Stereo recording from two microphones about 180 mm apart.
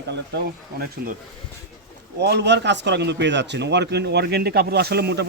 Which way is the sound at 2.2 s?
70° right (ahead or behind).